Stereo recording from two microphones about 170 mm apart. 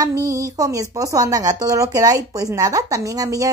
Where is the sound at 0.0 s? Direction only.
20° right (ahead or behind).